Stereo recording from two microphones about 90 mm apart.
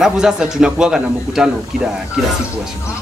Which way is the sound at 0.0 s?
5° right (ahead or behind).